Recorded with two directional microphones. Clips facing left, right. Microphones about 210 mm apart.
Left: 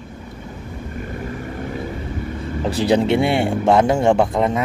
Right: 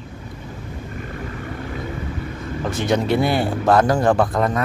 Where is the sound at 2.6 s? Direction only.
30° left (ahead or behind).